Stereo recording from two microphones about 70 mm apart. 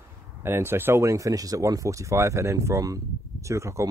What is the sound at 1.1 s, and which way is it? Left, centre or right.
Speech, right.